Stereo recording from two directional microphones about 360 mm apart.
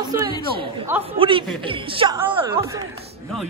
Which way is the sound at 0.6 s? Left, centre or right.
Centre.